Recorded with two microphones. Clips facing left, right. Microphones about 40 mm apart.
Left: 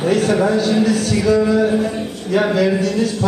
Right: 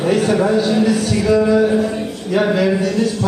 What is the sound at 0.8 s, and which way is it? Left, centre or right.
A man's voice, centre.